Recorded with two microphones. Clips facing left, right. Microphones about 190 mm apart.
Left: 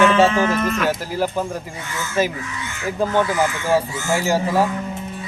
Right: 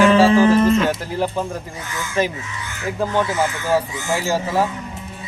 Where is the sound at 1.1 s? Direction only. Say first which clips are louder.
Even; 5° left (ahead or behind).